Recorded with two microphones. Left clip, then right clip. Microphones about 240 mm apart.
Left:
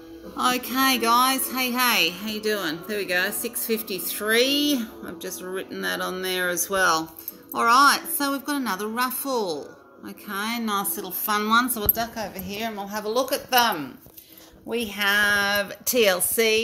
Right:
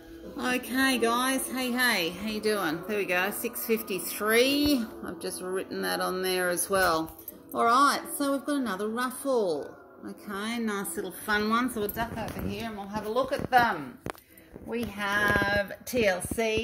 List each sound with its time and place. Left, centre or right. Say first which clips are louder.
0.4 s a woman's voice: left 5 dB; centre
11.7 s a woman's voice: left 3 dB; left